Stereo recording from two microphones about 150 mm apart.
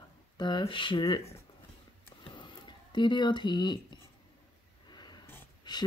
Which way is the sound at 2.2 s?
30° left (ahead or behind).